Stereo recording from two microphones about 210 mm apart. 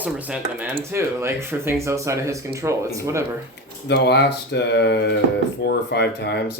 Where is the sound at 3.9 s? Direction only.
55° left (ahead or behind).